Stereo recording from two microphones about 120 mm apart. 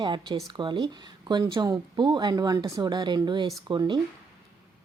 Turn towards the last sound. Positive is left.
turn(degrees=-40)  # may be behind; listen again after turning